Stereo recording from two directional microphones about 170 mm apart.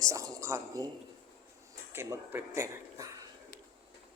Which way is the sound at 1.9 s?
15° right (ahead or behind).